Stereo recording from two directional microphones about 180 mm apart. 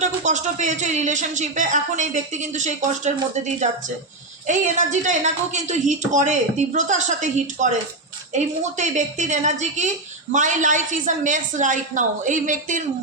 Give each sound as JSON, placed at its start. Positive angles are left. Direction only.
{"t": 0.0, "sound": "a woman's voice", "side_deg": -40}
{"t": 8.8, "sound": "a woman's voice", "side_deg": -40}